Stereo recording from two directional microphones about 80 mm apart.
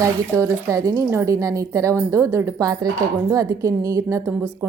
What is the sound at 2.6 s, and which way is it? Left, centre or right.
A woman's voice, right.